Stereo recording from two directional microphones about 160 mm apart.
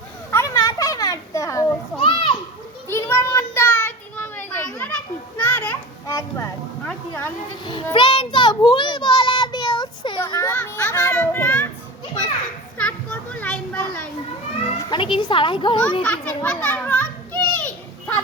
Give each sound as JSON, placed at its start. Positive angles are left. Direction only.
{"t": 0.3, "sound": "children playing", "side_deg": 20}
{"t": 2.0, "sound": "children playing", "side_deg": 35}
{"t": 2.9, "sound": "child singing", "side_deg": 15}
{"t": 6.1, "sound": "music", "side_deg": 20}
{"t": 6.8, "sound": "a sound", "side_deg": 10}
{"t": 7.9, "sound": "child singing", "side_deg": 30}
{"t": 10.4, "sound": "children playing", "side_deg": 15}
{"t": 12.7, "sound": "children playing", "side_deg": 10}
{"t": 14.8, "sound": "a sound", "side_deg": 30}
{"t": 16.0, "sound": "children playing", "side_deg": 10}